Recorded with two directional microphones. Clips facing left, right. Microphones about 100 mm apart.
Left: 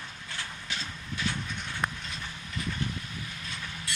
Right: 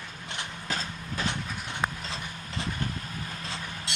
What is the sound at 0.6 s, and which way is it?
Vehicle, 40° right (ahead or behind).